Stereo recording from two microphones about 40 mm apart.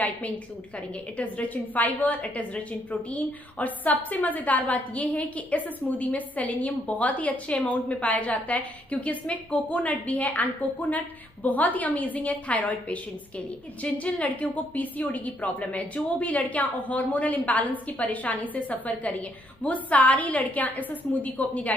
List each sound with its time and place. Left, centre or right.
1.1 s a woman's voice: left